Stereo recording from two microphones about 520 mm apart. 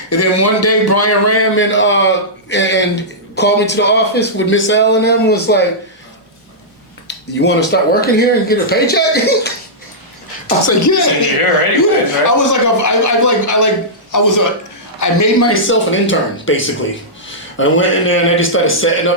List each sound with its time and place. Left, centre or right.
0.1 s a man's voice: left
7.1 s a man's voice: centre
10.7 s a man's voice: left